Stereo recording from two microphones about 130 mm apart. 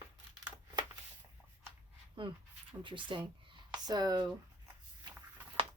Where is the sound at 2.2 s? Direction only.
40° right (ahead or behind).